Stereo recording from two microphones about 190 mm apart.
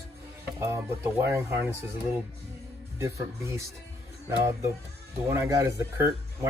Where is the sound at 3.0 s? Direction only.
15° right (ahead or behind).